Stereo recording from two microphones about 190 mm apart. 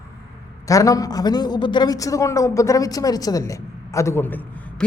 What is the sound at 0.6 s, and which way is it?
A man's voice, 15° left (ahead or behind).